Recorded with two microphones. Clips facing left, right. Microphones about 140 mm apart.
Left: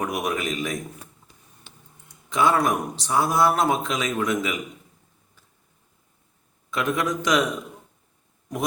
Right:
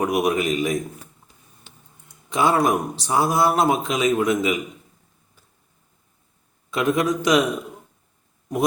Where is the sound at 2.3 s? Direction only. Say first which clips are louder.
Right 2 dB; 10° right (ahead or behind).